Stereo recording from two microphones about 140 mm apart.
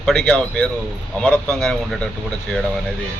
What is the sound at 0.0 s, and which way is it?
A man's voice, 5° left (ahead or behind).